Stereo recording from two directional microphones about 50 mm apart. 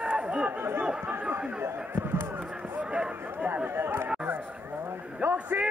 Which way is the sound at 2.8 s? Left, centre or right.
Right.